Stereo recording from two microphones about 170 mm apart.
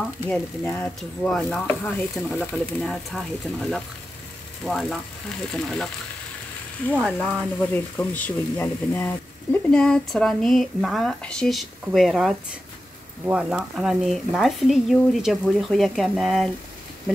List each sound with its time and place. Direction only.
0.3 s speech: 5° left (ahead or behind)
4.6 s speech: centre (ahead or behind)
6.9 s speech: 5° left (ahead or behind)